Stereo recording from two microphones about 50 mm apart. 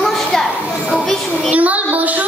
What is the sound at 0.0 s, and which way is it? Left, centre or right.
Children playing, centre.